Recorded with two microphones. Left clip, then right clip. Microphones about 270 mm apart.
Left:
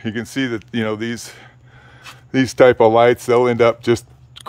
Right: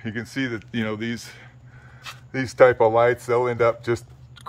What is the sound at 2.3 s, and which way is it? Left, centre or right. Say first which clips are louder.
Speech: left 4 dB; left.